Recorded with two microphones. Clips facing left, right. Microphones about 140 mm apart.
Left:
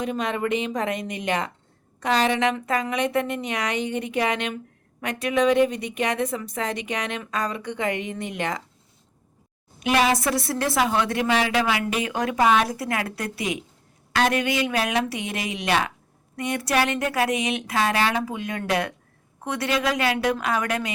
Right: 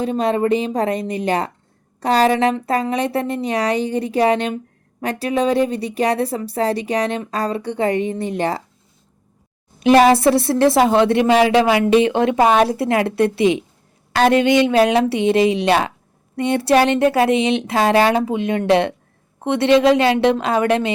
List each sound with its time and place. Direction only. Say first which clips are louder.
0.0 s speech: right 8 dB; 35° right (ahead or behind)
9.8 s a woman's voice: right 10 dB; 35° right (ahead or behind)